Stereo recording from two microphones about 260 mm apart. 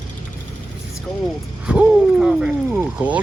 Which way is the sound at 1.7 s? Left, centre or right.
Centre.